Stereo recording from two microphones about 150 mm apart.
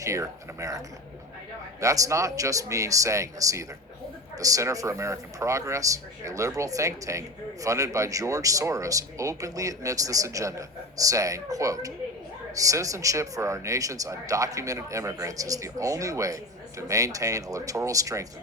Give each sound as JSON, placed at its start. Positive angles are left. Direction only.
{"t": 0.0, "sound": "speech", "side_deg": -20}
{"t": 1.8, "sound": "speech", "side_deg": -20}